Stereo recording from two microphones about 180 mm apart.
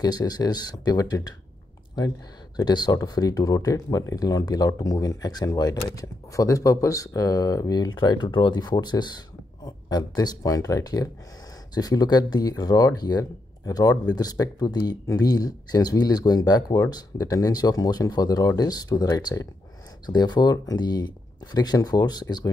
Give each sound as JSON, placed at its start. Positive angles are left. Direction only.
{"t": 0.0, "sound": "speech", "side_deg": 20}